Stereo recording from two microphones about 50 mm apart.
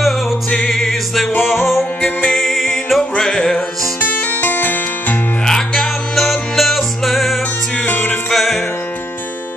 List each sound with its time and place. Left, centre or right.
0.5 s music: centre
4.0 s music: left
5.4 s music: centre